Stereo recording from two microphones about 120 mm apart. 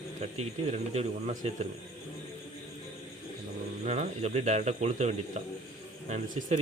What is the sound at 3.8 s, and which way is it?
Speech, 65° right (ahead or behind).